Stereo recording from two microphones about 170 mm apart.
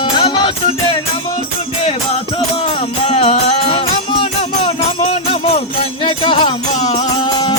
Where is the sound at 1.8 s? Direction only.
35° left (ahead or behind).